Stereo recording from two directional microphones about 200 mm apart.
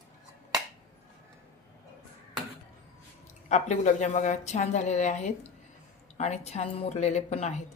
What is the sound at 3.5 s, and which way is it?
A woman's voice, 35° left (ahead or behind).